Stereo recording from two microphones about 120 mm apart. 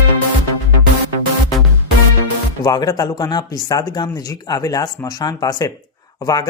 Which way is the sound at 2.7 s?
30° left (ahead or behind).